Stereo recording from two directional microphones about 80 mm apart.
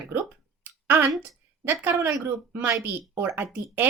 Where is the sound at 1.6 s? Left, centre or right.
Right.